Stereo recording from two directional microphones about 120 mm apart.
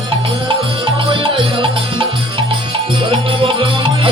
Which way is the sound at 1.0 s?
45° right (ahead or behind).